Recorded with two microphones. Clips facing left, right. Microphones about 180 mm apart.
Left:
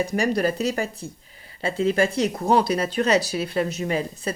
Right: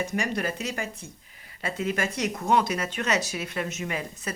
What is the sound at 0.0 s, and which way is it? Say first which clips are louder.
Speech: left 6 dB; 35° left (ahead or behind).